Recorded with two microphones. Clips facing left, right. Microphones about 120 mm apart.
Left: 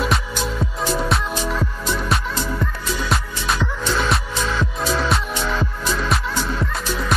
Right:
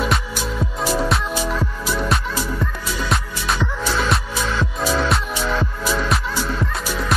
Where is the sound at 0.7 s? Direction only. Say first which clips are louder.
Right 2 dB; centre (ahead or behind).